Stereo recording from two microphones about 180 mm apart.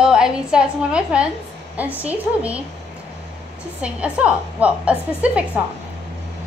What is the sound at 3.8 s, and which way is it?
A woman's voice, 5° right (ahead or behind).